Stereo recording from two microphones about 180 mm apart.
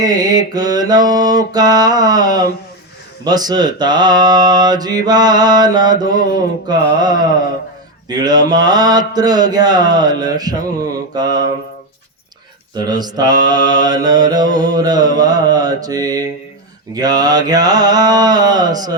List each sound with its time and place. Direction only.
0.0 s mantra: 20° right (ahead or behind)
12.7 s mantra: 20° right (ahead or behind)